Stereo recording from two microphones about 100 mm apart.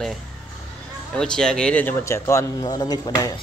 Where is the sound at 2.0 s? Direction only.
30° left (ahead or behind).